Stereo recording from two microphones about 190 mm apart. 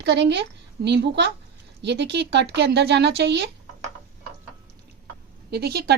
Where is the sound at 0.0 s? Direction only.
65° right (ahead or behind).